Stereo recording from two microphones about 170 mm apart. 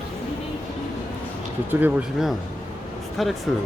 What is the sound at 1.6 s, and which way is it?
Speech, 5° right (ahead or behind).